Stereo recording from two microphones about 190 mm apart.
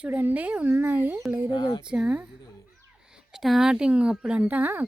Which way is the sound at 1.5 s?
25° left (ahead or behind).